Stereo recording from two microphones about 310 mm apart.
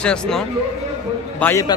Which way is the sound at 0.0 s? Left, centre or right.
Centre.